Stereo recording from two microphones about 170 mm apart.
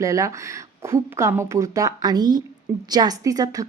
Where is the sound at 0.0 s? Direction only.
20° right (ahead or behind).